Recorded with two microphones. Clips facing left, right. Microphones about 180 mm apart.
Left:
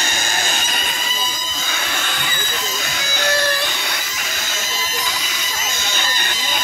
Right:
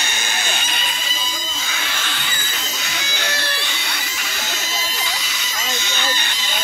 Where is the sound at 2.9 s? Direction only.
45° left (ahead or behind).